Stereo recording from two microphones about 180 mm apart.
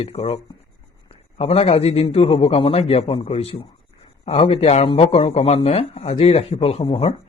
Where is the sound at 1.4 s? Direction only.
35° left (ahead or behind).